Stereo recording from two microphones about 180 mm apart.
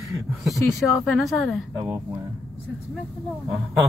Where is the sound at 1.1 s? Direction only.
Centre (ahead or behind).